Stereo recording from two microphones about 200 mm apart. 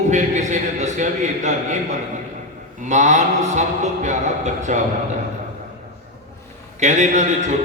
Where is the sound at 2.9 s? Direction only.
35° right (ahead or behind).